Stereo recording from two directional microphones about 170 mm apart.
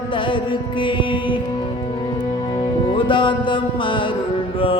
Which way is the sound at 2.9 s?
30° left (ahead or behind).